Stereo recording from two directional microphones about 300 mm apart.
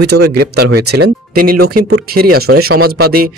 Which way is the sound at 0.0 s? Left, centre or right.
Right.